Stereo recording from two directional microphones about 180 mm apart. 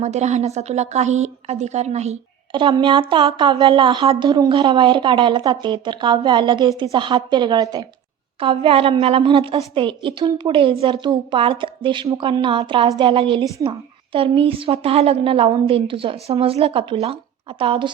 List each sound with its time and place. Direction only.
0.0 s a woman's voice: 40° right (ahead or behind)